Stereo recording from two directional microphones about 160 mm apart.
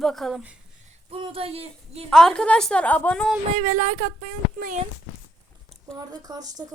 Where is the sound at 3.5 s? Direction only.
50° right (ahead or behind).